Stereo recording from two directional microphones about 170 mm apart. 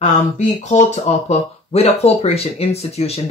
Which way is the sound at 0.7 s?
40° left (ahead or behind).